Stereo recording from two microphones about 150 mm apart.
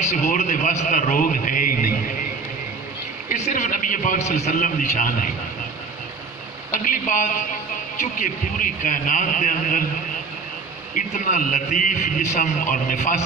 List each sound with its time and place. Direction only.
0.3 s a man's voice: 60° left (ahead or behind)
3.3 s a man's voice: 55° left (ahead or behind)
6.7 s a man's voice: 60° left (ahead or behind)
11.0 s a man's voice: 60° left (ahead or behind)